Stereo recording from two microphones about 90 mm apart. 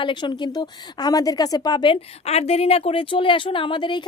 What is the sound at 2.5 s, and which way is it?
Speech, 90° left.